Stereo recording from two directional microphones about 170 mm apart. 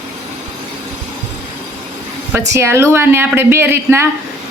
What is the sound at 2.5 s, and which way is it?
Speech, 15° right (ahead or behind).